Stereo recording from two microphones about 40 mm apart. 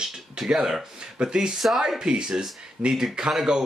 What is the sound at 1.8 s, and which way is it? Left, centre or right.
Speech, centre.